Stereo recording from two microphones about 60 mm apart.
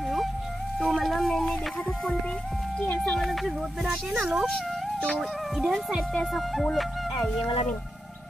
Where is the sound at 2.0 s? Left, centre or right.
Centre.